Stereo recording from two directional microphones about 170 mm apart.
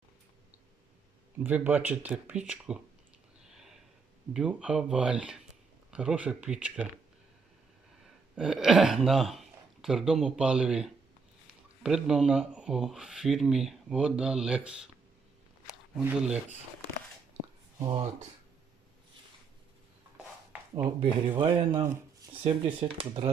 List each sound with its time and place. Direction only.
1.5 s speech: 10° right (ahead or behind)
3.4 s a sound: 5° right (ahead or behind)
4.4 s speech: 5° right (ahead or behind)
8.4 s speech: 5° right (ahead or behind)
16.0 s speech: 5° right (ahead or behind)
17.7 s speech: 30° right (ahead or behind)
21.0 s speech: 30° right (ahead or behind)